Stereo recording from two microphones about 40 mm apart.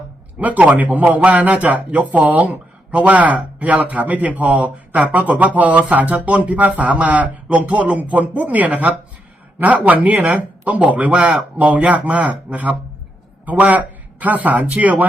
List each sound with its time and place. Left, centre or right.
0.3 s a man's voice: right